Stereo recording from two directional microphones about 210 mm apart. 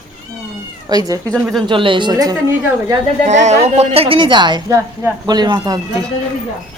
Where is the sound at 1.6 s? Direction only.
25° right (ahead or behind).